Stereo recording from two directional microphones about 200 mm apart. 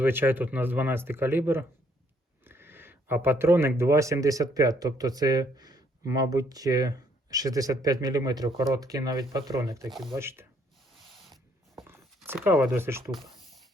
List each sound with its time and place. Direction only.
0.0 s speech: 10° right (ahead or behind)
9.9 s speech: centre (ahead or behind)
10.2 s speech: 10° right (ahead or behind)
11.9 s speech: 10° right (ahead or behind)
13.1 s a sound: centre (ahead or behind)